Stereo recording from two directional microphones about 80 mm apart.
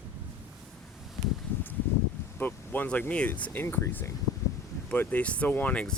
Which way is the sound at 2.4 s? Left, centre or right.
Left.